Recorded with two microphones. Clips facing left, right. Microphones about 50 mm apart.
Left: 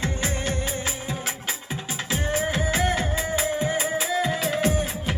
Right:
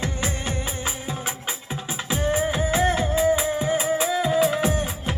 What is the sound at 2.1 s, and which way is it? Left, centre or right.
Music, right.